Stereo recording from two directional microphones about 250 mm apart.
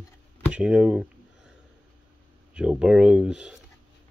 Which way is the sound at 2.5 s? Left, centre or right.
Centre.